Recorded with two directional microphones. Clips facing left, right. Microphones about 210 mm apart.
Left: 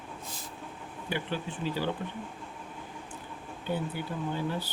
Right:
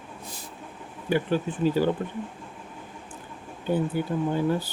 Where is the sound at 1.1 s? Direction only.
45° right (ahead or behind).